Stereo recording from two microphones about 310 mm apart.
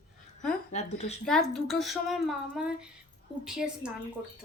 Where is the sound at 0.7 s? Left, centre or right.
Left.